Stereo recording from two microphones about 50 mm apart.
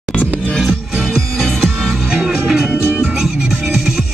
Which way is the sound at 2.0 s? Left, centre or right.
Centre.